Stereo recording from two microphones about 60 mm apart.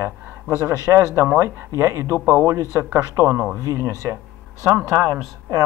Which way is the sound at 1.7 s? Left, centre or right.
Right.